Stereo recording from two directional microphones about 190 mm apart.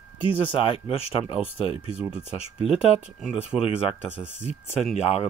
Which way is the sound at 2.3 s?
30° left (ahead or behind).